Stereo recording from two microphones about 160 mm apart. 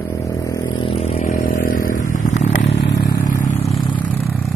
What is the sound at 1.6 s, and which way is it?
Vehicle, 55° left (ahead or behind).